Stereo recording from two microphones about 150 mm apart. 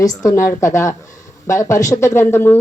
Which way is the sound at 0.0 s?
25° left (ahead or behind).